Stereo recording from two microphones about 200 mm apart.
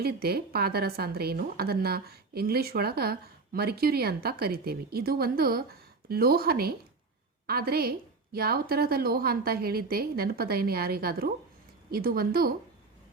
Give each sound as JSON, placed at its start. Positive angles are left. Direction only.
{"t": 0.0, "sound": "a woman's voice", "side_deg": -50}